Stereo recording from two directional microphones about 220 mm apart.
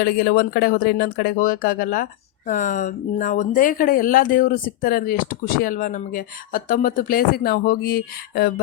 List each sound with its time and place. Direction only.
0.0 s speech: 45° left (ahead or behind)